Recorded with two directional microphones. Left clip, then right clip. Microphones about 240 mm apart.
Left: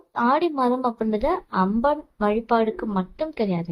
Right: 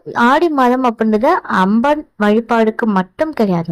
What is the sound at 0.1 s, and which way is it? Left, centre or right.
A woman's voice, right.